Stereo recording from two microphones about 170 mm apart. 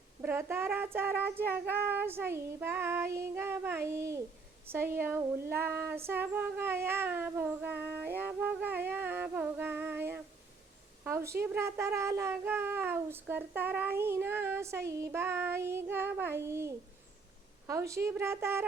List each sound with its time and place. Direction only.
0.2 s speech: 10° right (ahead or behind)
6.1 s child singing: 10° right (ahead or behind)
11.0 s a sound: 15° right (ahead or behind)
11.3 s speech: 15° right (ahead or behind)